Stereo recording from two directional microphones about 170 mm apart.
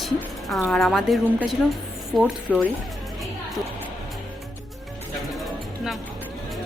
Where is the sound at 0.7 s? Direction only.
Centre (ahead or behind).